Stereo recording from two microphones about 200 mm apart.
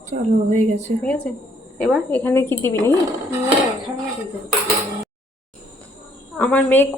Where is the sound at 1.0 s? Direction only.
5° left (ahead or behind).